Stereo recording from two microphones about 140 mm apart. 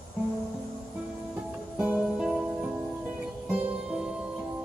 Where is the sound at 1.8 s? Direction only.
10° right (ahead or behind).